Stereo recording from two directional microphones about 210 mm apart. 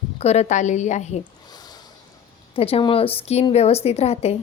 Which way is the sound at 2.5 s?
25° left (ahead or behind).